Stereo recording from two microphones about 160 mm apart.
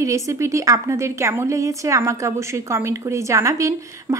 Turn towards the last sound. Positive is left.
turn(degrees=-20)  # may be behind; listen again after turning